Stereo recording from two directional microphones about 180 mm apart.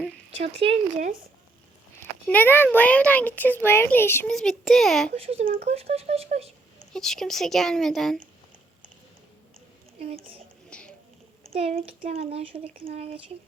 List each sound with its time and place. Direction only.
0.3 s speech: 35° right (ahead or behind)
2.2 s a child's voice: 10° left (ahead or behind)
5.1 s speech: 35° right (ahead or behind)
6.9 s speech: centre (ahead or behind)
10.7 s a sound: 5° left (ahead or behind)
11.5 s speech: 35° right (ahead or behind)